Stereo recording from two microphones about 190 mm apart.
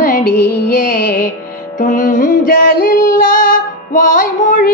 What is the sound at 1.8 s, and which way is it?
Music, 40° left (ahead or behind).